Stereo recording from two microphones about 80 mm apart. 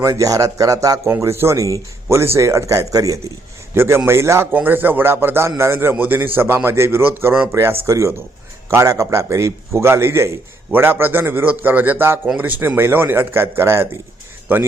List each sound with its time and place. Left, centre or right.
0.0 s speech: right
1.1 s speech: right
3.8 s speech: right
4.5 s a man's voice: right